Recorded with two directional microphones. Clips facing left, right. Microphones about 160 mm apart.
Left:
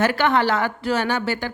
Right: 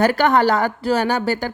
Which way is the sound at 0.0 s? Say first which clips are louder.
Right 4 dB; 40° right (ahead or behind).